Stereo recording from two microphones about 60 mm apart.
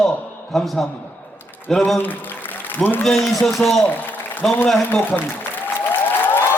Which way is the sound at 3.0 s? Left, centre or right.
Centre.